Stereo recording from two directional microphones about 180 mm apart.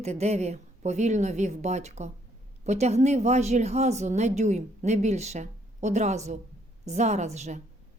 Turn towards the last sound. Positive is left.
turn(degrees=-40)  # may be behind; listen again after turning